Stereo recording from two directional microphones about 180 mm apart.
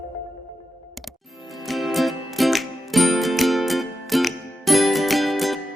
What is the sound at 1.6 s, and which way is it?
Music, centre (ahead or behind).